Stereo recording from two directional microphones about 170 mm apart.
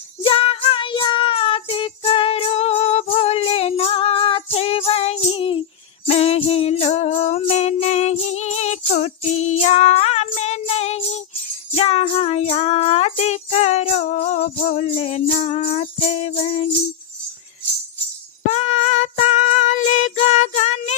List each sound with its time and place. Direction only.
0.3 s music: 35° left (ahead or behind)
4.5 s jingle bell: 35° left (ahead or behind)
6.1 s music: 35° left (ahead or behind)
18.4 s music: 40° left (ahead or behind)